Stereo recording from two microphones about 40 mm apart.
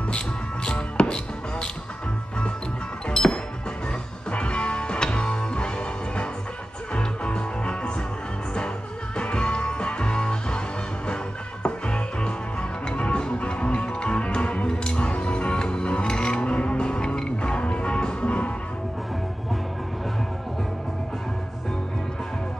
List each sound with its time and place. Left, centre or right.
0.7 s music: left
3.1 s music: centre
4.3 s music: left
11.6 s music: left